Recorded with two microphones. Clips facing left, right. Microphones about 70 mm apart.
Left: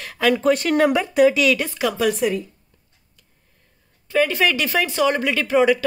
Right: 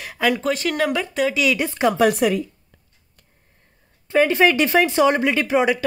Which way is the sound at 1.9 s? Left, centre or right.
Right.